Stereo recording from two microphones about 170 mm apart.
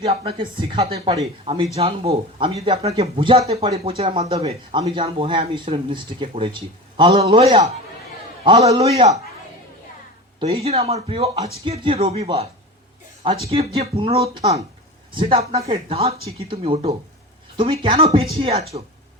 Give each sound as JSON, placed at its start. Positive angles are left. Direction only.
{"t": 0.0, "sound": "a woman's voice", "side_deg": -35}
{"t": 1.5, "sound": "speech", "side_deg": -35}
{"t": 8.4, "sound": "a woman's voice", "side_deg": -20}
{"t": 8.7, "sound": "speech", "side_deg": -35}
{"t": 10.4, "sound": "speech", "side_deg": -35}